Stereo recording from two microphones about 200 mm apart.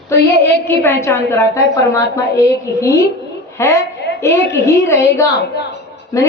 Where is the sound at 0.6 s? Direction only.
10° left (ahead or behind).